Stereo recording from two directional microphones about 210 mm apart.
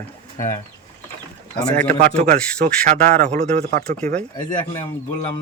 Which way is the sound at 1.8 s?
35° right (ahead or behind).